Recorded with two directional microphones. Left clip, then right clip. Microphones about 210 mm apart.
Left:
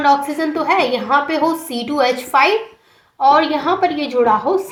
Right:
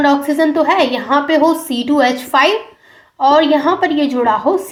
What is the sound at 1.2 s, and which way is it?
A woman's voice, 30° right (ahead or behind).